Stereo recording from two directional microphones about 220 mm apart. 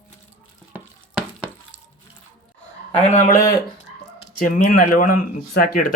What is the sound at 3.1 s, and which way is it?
Speech, 35° left (ahead or behind).